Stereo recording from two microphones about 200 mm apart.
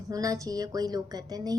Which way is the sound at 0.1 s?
15° right (ahead or behind).